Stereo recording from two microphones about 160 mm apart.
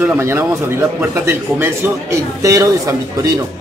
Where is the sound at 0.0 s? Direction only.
15° right (ahead or behind).